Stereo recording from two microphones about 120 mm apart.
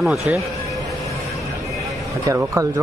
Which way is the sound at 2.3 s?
25° right (ahead or behind).